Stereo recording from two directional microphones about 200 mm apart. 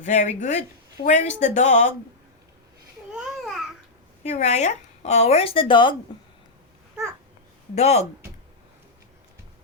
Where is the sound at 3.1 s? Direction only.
5° right (ahead or behind).